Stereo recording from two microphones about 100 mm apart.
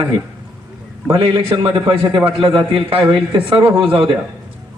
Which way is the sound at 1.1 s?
65° right (ahead or behind).